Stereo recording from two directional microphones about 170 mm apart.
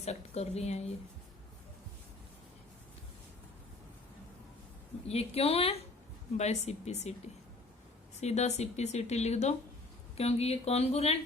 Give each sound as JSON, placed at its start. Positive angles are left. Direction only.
{"t": 0.0, "sound": "speech", "side_deg": 40}
{"t": 5.0, "sound": "speech", "side_deg": 35}
{"t": 8.2, "sound": "speech", "side_deg": 40}